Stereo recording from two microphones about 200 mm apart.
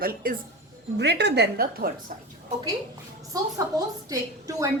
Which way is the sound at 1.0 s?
55° right (ahead or behind).